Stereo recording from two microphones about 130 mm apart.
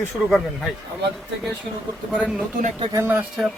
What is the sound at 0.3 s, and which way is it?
Speech, centre (ahead or behind).